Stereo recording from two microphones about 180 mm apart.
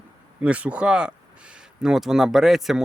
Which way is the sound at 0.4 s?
5° right (ahead or behind).